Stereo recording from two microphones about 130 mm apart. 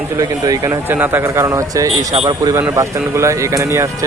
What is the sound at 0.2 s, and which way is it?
Speech, 25° right (ahead or behind).